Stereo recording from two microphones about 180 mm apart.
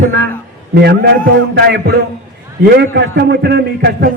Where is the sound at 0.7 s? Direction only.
65° right (ahead or behind).